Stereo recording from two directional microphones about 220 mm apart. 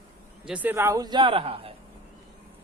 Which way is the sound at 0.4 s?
5° right (ahead or behind).